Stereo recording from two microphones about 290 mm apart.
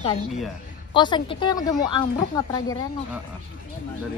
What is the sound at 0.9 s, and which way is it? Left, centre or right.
Speech, centre.